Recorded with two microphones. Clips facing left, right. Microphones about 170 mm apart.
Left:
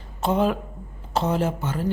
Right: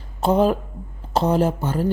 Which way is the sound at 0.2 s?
35° right (ahead or behind).